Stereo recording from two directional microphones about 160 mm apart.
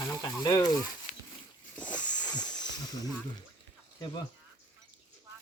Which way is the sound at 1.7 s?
10° left (ahead or behind).